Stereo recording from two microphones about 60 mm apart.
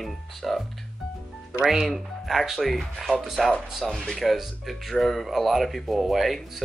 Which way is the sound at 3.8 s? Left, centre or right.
Centre.